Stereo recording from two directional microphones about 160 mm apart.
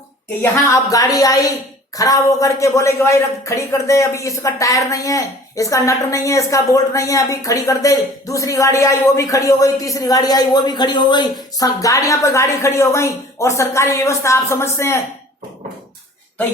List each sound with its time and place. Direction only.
0.5 s speech: 20° left (ahead or behind)